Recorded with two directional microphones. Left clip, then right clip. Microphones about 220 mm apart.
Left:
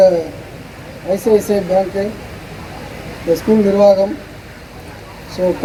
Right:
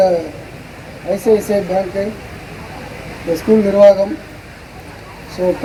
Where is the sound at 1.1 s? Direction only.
55° left (ahead or behind).